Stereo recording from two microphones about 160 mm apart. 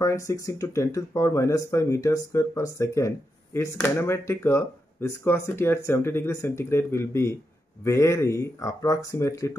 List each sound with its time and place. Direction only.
0.0 s speech: 20° left (ahead or behind)